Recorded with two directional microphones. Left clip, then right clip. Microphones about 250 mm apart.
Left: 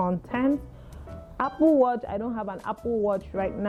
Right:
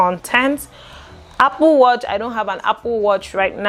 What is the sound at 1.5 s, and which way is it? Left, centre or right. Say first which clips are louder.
Speech: right 6 dB; right.